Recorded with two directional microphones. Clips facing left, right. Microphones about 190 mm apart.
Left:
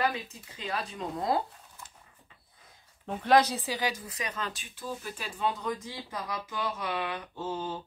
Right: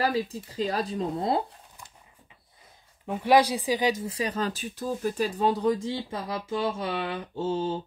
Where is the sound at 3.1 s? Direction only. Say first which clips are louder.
Right 3 dB; 10° right (ahead or behind).